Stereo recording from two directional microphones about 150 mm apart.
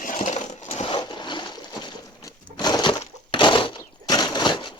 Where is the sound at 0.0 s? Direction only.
55° left (ahead or behind).